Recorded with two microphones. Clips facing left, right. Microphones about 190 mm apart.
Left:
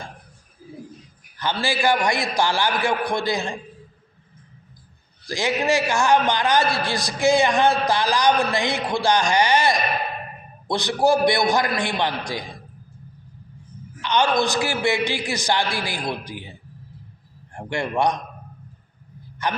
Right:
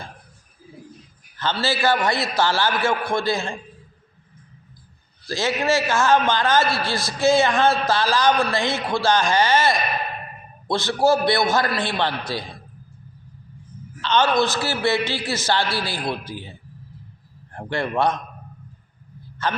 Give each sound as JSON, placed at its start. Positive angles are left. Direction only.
{"t": 1.4, "sound": "a man's voice", "side_deg": 15}
{"t": 5.2, "sound": "a man's voice", "side_deg": 15}
{"t": 14.0, "sound": "a man's voice", "side_deg": 15}
{"t": 19.4, "sound": "a man's voice", "side_deg": 15}